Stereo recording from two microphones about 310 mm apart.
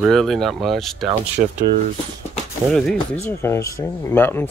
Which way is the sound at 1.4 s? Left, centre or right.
Right.